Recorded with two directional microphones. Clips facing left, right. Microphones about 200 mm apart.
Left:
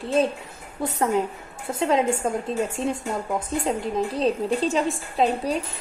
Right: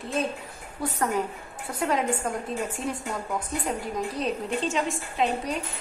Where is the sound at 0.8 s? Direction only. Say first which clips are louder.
Left 4 dB; 25° left (ahead or behind).